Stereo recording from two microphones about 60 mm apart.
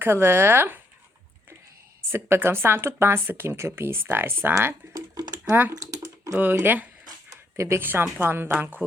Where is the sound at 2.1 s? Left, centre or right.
Right.